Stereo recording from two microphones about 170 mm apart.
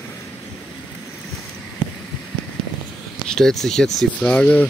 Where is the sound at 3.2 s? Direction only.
5° left (ahead or behind).